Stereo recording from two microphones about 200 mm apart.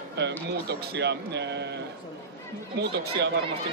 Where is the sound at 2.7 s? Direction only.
60° right (ahead or behind).